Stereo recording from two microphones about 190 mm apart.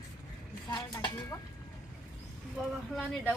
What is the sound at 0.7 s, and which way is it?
Speech, 20° left (ahead or behind).